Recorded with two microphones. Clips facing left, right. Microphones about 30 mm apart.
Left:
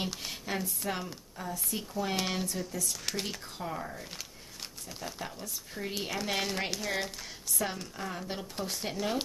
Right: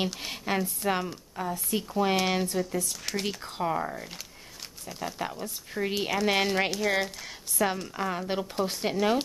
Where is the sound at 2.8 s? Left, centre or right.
Centre.